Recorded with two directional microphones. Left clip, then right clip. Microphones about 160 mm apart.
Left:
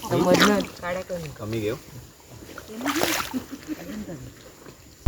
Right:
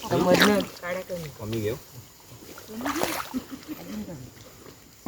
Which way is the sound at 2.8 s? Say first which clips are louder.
Left 4 dB; 25° left (ahead or behind).